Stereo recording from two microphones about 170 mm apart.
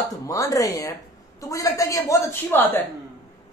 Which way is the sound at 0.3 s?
20° left (ahead or behind).